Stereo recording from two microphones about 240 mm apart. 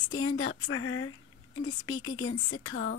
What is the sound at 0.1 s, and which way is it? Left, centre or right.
Speech, left.